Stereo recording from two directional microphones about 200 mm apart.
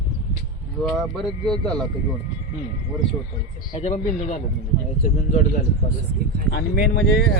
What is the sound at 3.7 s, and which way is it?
Speech, 35° left (ahead or behind).